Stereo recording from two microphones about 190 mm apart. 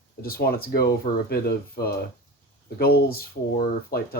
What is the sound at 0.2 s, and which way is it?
Speech, 50° left (ahead or behind).